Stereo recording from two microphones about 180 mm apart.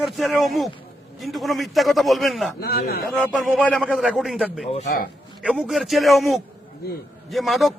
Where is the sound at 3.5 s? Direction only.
5° left (ahead or behind).